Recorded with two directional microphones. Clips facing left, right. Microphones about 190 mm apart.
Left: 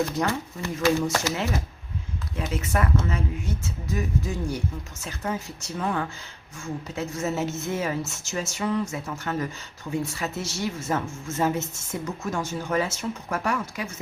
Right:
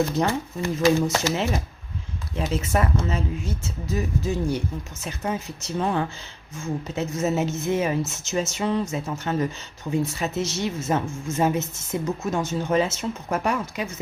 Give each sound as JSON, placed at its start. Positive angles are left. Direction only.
{"t": 0.2, "sound": "a woman's voice", "side_deg": -25}